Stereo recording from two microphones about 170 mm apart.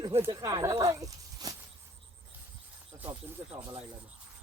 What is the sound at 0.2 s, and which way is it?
Speech, 20° right (ahead or behind).